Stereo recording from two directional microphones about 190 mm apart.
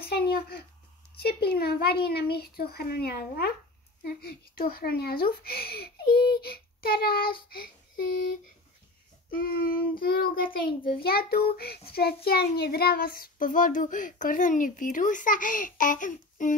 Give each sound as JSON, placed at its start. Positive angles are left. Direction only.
{"t": 0.1, "sound": "a sound", "side_deg": 55}
{"t": 1.2, "sound": "a child's voice", "side_deg": 55}
{"t": 4.6, "sound": "a child's voice", "side_deg": 55}
{"t": 6.4, "sound": "child singing", "side_deg": 55}
{"t": 7.4, "sound": "a child's voice", "side_deg": 50}
{"t": 9.3, "sound": "a child's voice", "side_deg": 50}